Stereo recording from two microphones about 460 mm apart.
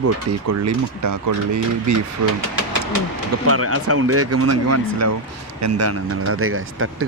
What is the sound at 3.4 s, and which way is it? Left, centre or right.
Speech, right.